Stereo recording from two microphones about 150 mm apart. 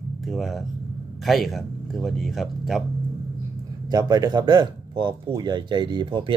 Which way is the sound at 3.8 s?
25° right (ahead or behind).